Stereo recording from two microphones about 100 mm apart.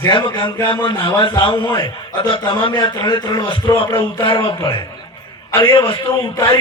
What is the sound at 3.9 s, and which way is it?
Speech, 55° left (ahead or behind).